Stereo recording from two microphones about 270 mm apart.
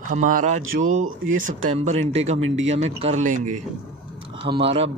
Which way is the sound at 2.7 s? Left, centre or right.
Right.